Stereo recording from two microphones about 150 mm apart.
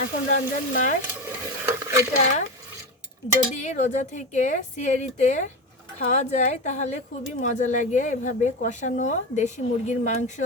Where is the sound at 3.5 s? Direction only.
50° left (ahead or behind).